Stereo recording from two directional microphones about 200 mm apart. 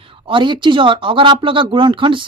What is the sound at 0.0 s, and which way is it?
Speech, 25° right (ahead or behind).